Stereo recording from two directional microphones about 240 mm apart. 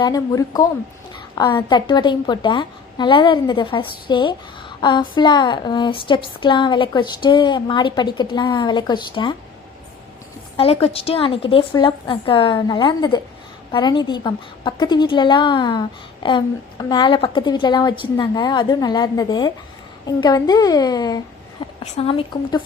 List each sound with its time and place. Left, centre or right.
0.0 s a woman's voice: centre
10.6 s a woman's voice: left